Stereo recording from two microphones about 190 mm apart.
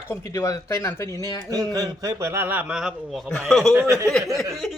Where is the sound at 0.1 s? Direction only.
15° left (ahead or behind).